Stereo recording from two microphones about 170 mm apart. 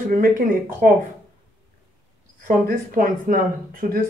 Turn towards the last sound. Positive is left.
turn(degrees=-55)  # may be behind; listen again after turning